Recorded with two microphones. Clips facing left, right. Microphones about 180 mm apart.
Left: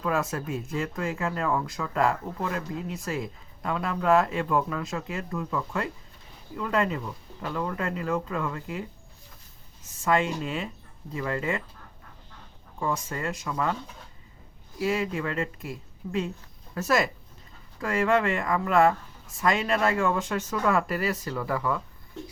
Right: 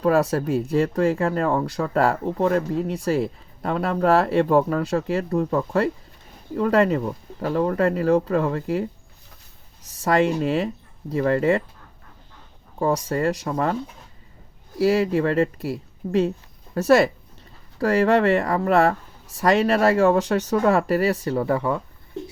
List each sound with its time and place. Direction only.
0.0 s speech: 35° right (ahead or behind)
10.0 s speech: 35° right (ahead or behind)
12.8 s speech: 40° right (ahead or behind)
14.8 s speech: 35° right (ahead or behind)
20.1 s speech: 75° right (ahead or behind)
20.6 s speech: 35° right (ahead or behind)